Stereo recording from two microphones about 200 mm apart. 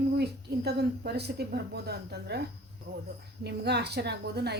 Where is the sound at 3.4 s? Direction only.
55° right (ahead or behind).